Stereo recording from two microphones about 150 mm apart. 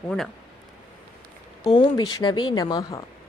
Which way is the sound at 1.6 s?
45° left (ahead or behind).